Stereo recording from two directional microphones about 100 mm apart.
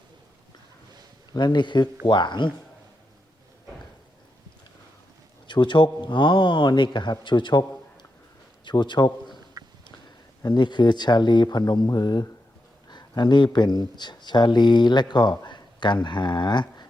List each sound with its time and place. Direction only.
1.3 s speech: 45° left (ahead or behind)
5.5 s speech: 50° left (ahead or behind)
8.6 s a man's voice: 50° left (ahead or behind)
10.4 s speech: 45° left (ahead or behind)